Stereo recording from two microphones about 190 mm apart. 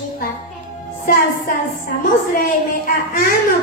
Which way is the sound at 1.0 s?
45° left (ahead or behind).